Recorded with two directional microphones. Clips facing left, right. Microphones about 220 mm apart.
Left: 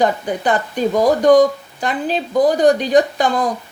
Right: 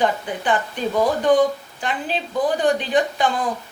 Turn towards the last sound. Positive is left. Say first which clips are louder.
# left 5 dB
turn(degrees=40)  # may be behind; listen again after turning